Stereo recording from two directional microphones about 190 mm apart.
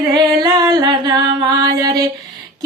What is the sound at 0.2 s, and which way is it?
Music, 20° right (ahead or behind).